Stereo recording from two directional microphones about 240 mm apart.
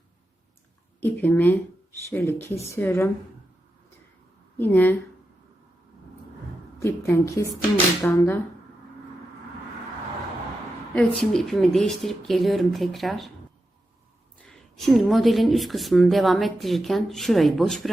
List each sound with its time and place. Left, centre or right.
1.0 s a woman's voice: centre
4.5 s a woman's voice: centre
6.7 s a woman's voice: centre
10.9 s speech: centre
14.4 s speech: centre